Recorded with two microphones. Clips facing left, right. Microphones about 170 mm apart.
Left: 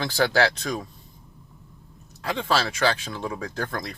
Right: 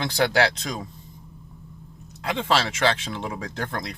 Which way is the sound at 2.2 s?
20° right (ahead or behind).